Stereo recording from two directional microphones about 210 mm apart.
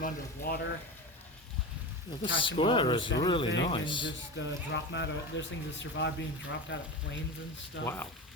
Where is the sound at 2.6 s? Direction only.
25° left (ahead or behind).